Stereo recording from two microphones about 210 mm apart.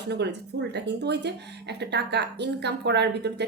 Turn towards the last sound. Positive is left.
turn(degrees=-55)  # may be behind; listen again after turning